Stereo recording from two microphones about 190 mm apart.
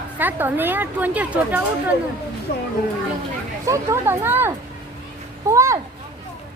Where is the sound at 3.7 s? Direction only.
15° right (ahead or behind).